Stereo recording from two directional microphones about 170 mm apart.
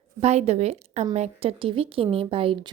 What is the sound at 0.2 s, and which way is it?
Speech, 40° right (ahead or behind).